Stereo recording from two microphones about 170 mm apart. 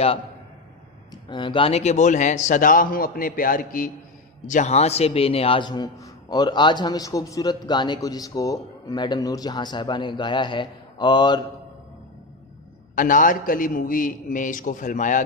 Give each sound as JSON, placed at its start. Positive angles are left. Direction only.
{"t": 1.1, "sound": "a man's voice", "side_deg": 25}
{"t": 12.9, "sound": "a man's voice", "side_deg": 50}